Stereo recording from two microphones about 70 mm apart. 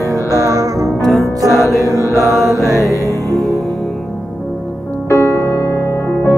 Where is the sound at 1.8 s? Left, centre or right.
Left.